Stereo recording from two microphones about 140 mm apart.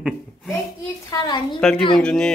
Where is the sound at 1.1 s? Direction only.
30° left (ahead or behind).